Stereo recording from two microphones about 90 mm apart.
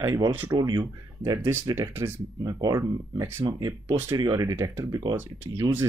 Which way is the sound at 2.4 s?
45° right (ahead or behind).